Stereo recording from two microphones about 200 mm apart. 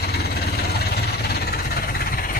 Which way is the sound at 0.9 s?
55° left (ahead or behind).